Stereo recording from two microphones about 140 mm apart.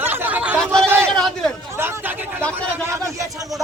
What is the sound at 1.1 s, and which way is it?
Chatter, 5° left (ahead or behind).